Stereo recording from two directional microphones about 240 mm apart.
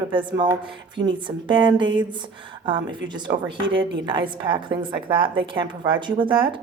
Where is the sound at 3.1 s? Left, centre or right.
Centre.